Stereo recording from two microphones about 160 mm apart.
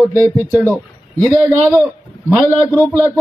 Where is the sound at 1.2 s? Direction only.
15° right (ahead or behind).